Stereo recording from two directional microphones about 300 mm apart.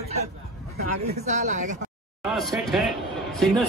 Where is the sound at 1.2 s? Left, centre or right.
Right.